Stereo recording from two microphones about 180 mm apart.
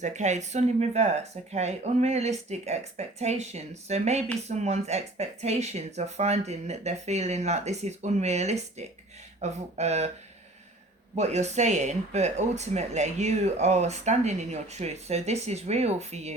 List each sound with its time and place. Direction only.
0.0 s speech: 40° right (ahead or behind)
11.1 s speech: 40° right (ahead or behind)